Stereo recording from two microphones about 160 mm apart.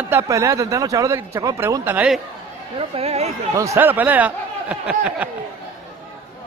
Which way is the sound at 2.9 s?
40° right (ahead or behind).